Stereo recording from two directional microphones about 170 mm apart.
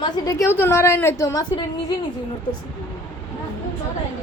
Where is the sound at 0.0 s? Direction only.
20° left (ahead or behind).